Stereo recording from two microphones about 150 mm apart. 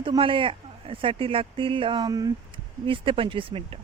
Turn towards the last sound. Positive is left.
turn(degrees=-35)  # may be behind; listen again after turning